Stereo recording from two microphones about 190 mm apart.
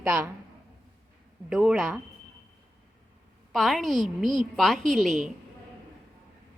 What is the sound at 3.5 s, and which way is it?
A woman's voice, centre (ahead or behind).